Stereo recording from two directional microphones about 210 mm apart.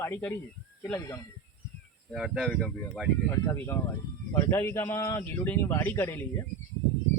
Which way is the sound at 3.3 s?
15° left (ahead or behind).